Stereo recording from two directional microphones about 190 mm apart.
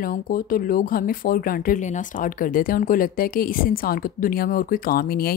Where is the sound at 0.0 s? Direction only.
50° left (ahead or behind).